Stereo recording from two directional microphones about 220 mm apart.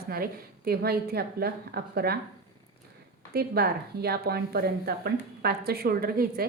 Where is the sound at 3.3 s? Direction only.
45° right (ahead or behind).